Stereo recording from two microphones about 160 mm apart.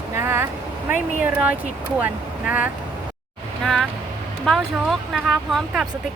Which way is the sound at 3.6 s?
Centre (ahead or behind).